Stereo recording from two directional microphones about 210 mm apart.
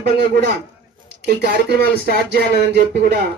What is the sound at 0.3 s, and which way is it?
Speech, 50° right (ahead or behind).